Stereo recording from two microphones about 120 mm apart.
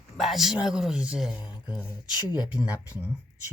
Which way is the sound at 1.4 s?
40° left (ahead or behind).